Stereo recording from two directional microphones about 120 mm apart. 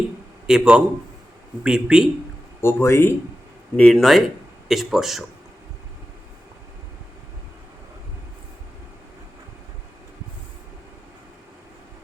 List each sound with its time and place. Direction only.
0.4 s speech: 5° right (ahead or behind)
2.6 s speech: 20° left (ahead or behind)
3.8 s speech: 5° left (ahead or behind)